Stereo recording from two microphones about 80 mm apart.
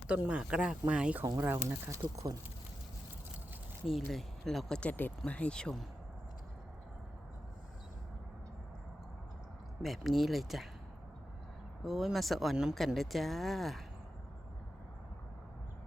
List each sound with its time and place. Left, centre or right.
0.1 s speech: centre
1.5 s speech: right
3.8 s speech: centre
9.8 s speech: centre
11.8 s speech: centre